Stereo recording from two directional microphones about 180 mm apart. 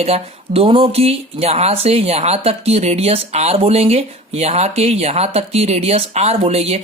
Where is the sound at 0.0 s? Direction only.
35° right (ahead or behind).